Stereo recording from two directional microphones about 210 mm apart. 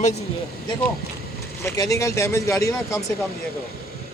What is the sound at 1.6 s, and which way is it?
Speech, 15° left (ahead or behind).